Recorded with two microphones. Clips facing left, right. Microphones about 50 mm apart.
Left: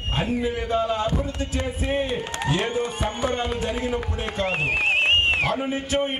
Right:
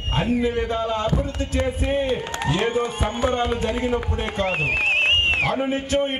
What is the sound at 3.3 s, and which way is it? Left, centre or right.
A man's voice, centre.